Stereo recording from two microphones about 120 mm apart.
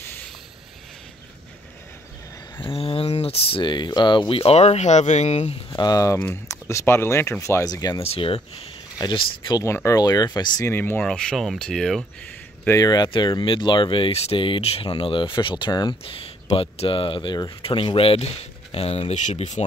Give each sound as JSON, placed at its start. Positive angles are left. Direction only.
{"t": 2.7, "sound": "speech", "side_deg": 55}
{"t": 5.7, "sound": "speech", "side_deg": 35}
{"t": 8.0, "sound": "speech", "side_deg": 55}
{"t": 8.9, "sound": "speech", "side_deg": 35}
{"t": 9.7, "sound": "speech", "side_deg": 25}
{"t": 10.7, "sound": "speech", "side_deg": 20}
{"t": 11.0, "sound": "speech", "side_deg": 5}
{"t": 12.6, "sound": "speech", "side_deg": 30}
{"t": 16.1, "sound": "speech", "side_deg": 55}